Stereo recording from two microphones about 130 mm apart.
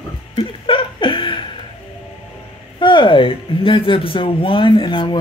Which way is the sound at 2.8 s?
40° left (ahead or behind).